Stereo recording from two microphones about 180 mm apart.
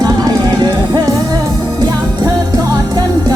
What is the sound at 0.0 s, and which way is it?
Music, 20° right (ahead or behind).